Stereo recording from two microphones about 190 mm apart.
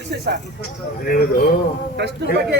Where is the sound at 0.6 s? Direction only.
50° left (ahead or behind).